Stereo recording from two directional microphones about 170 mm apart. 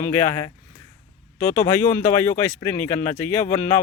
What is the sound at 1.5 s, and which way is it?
Speech, 15° left (ahead or behind).